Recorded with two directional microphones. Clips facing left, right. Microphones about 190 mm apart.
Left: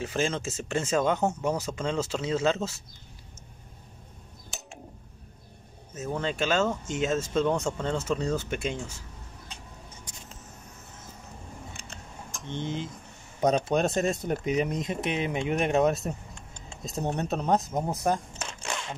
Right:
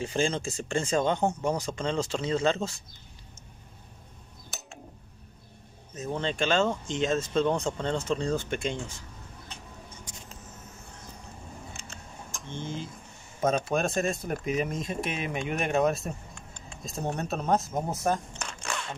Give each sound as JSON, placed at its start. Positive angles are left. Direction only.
{"t": 0.0, "sound": "speech", "side_deg": 0}
{"t": 6.2, "sound": "speech", "side_deg": 5}
{"t": 12.4, "sound": "speech", "side_deg": 20}
{"t": 17.9, "sound": "a sound", "side_deg": 15}